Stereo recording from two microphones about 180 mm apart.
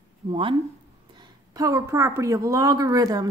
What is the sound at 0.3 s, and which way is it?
Speech, 30° right (ahead or behind).